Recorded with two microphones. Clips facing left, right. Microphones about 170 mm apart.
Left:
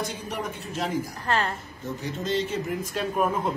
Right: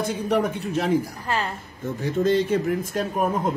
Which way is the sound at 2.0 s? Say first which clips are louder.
Right 8 dB; 55° right (ahead or behind).